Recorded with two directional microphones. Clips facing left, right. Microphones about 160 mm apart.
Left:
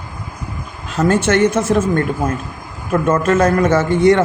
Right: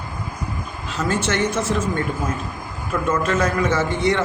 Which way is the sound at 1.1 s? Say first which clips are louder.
Left 8 dB; 50° left (ahead or behind).